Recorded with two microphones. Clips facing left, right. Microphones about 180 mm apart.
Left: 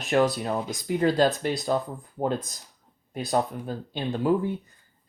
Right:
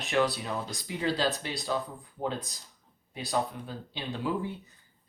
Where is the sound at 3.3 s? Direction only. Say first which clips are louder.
Left 5 dB; 50° left (ahead or behind).